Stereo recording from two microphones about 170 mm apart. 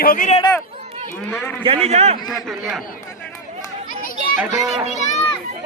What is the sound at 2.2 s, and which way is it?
Speech, centre (ahead or behind).